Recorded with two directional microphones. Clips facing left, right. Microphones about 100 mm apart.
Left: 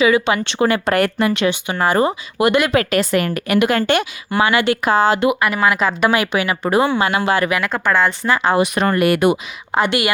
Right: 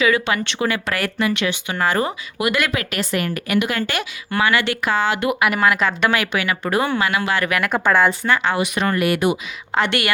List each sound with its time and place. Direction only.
0.0 s speech: 20° left (ahead or behind)
0.4 s speech: 40° left (ahead or behind)
1.5 s speech: 20° left (ahead or behind)
2.0 s speech: 30° left (ahead or behind)
3.8 s speech: 25° left (ahead or behind)
4.9 s speech: 40° left (ahead or behind)
5.4 s speech: centre (ahead or behind)
6.3 s speech: 30° left (ahead or behind)
7.6 s speech: 10° right (ahead or behind)
8.3 s speech: 35° left (ahead or behind)
9.0 s speech: 55° left (ahead or behind)
9.7 s speech: 10° left (ahead or behind)